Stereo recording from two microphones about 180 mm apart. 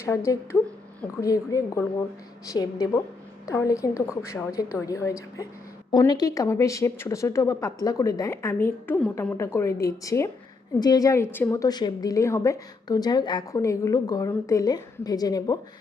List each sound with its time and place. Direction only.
0.0 s a woman's voice: 15° left (ahead or behind)